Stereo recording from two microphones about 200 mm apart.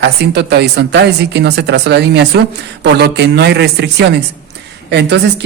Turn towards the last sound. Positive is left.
turn(degrees=-60)  # may be behind; listen again after turning